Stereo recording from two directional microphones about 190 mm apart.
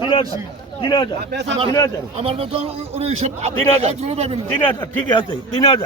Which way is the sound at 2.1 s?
30° right (ahead or behind).